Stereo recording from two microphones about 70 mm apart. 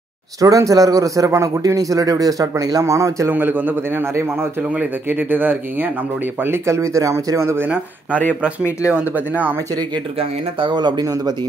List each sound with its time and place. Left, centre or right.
0.4 s a man's voice: right
2.8 s speech: right
3.3 s a man's voice: right
4.7 s speech: right
6.4 s speech: right
8.9 s speech: right
10.7 s speech: right